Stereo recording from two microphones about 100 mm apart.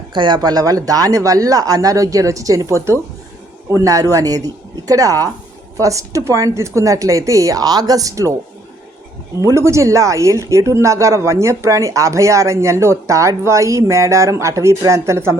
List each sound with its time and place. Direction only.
0.1 s speech: 50° right (ahead or behind); by 8.3 s 35° right (ahead or behind)
9.4 s speech: 30° right (ahead or behind)